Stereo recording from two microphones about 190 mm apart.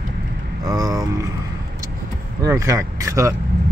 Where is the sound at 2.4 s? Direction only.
15° right (ahead or behind).